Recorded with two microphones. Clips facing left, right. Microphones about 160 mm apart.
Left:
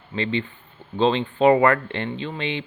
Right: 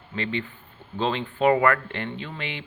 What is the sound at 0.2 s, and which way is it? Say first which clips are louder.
Speech: left 4 dB; 25° left (ahead or behind).